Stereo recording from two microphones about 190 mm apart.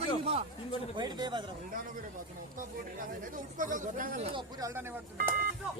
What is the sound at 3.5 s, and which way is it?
Speech, 45° right (ahead or behind).